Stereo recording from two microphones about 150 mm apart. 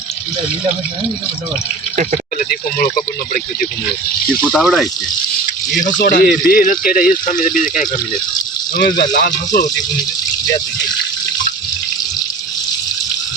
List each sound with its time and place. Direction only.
4.5 s speech: centre (ahead or behind)
6.0 s speech: 65° left (ahead or behind)
8.7 s speech: 70° left (ahead or behind)